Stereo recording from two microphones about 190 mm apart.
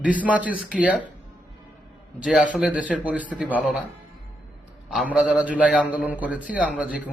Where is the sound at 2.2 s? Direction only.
5° right (ahead or behind).